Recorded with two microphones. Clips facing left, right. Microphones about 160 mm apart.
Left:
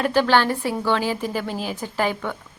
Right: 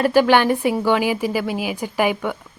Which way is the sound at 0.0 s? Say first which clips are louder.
Right 4 dB; 10° right (ahead or behind).